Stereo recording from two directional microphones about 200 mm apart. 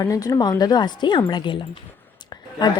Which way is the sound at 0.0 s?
15° left (ahead or behind).